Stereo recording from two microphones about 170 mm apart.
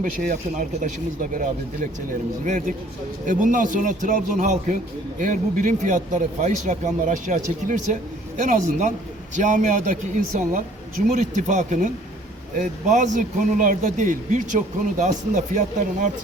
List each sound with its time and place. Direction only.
0.0 s speech: 50° right (ahead or behind)
2.4 s speech: 50° right (ahead or behind)